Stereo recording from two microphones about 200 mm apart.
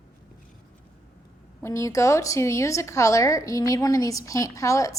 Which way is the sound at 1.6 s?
15° left (ahead or behind).